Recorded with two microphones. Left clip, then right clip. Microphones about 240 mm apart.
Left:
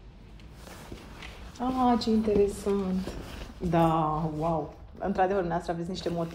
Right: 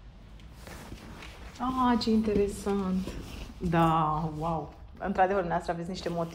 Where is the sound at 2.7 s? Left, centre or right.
Centre.